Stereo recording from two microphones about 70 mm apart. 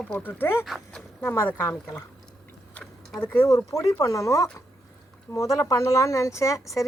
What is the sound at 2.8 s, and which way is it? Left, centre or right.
Tick-tock, centre.